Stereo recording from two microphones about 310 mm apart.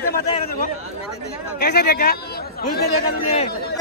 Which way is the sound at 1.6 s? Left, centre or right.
Left.